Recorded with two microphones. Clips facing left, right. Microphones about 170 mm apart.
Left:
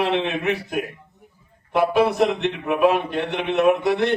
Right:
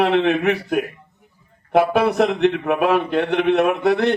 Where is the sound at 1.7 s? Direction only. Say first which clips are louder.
Right 2 dB; 60° right (ahead or behind).